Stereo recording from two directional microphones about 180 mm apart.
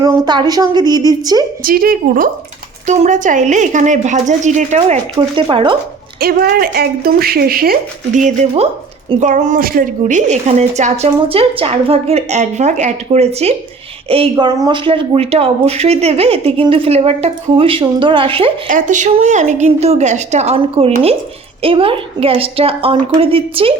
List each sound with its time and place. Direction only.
0.0 s a woman's voice: 20° right (ahead or behind)
1.6 s a woman's voice: 55° right (ahead or behind)
2.8 s a woman's voice: 40° right (ahead or behind)
5.1 s a woman's voice: 30° right (ahead or behind)
6.1 s speech: 55° right (ahead or behind); by 18.5 s 30° right (ahead or behind)
18.7 s speech: 45° right (ahead or behind); by 23.7 s 30° right (ahead or behind)